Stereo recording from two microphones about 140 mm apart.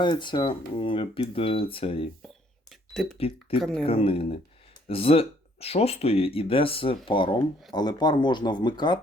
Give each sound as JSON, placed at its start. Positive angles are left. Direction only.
{"t": 0.0, "sound": "speech", "side_deg": 35}
{"t": 2.6, "sound": "cash register", "side_deg": 0}
{"t": 3.2, "sound": "speech", "side_deg": 45}
{"t": 3.6, "sound": "speech", "side_deg": 0}
{"t": 3.8, "sound": "speech", "side_deg": 40}